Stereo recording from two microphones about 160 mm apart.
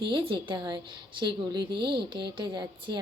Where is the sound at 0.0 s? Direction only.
30° right (ahead or behind).